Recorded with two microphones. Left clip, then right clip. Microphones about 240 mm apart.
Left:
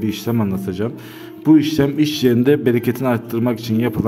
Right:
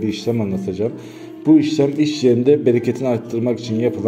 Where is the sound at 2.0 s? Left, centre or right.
Left.